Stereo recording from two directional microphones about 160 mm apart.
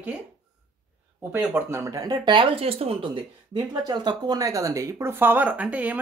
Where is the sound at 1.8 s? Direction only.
20° right (ahead or behind).